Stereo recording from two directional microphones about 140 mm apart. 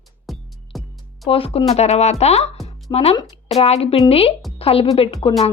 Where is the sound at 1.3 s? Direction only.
40° left (ahead or behind).